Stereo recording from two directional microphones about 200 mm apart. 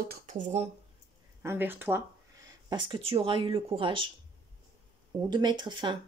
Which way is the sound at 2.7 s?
25° right (ahead or behind).